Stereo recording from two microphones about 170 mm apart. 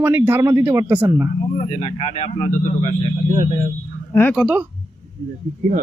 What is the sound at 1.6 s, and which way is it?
Speech, 35° left (ahead or behind).